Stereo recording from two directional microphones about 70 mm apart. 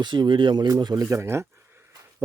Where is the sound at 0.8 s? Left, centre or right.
Right.